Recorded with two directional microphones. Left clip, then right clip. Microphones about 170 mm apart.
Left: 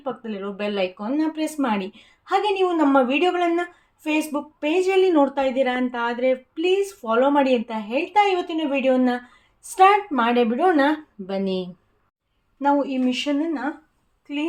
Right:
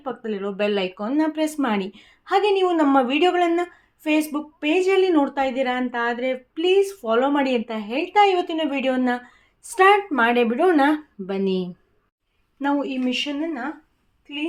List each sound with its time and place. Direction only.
0.0 s speech: 30° right (ahead or behind)